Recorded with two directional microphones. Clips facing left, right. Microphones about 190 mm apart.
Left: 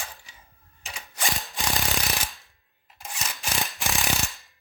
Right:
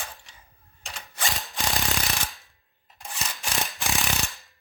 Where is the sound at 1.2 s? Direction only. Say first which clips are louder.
Even; centre (ahead or behind).